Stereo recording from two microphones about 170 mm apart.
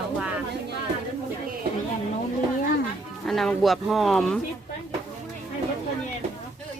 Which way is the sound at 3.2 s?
Centre (ahead or behind).